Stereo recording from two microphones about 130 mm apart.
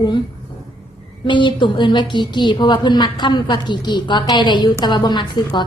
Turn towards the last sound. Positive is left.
turn(degrees=35)  # may be behind; listen again after turning